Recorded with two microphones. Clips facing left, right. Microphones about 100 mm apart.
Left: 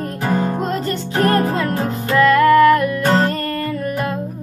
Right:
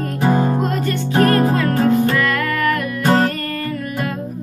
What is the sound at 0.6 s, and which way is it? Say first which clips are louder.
Music: right 1 dB; 30° left (ahead or behind).